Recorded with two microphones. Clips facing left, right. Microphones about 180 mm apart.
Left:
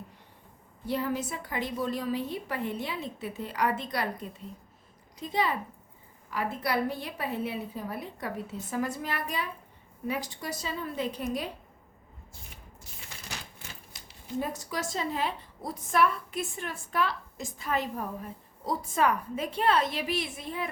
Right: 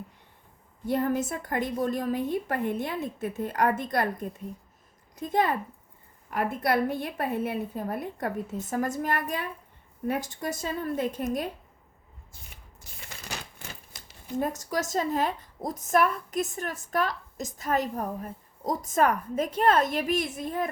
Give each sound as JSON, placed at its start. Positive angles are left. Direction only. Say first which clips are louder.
{"t": 0.9, "sound": "a woman's voice", "louder": "right 4 dB", "side_deg": -50}
{"t": 14.3, "sound": "a woman's voice", "louder": "right 4 dB", "side_deg": -45}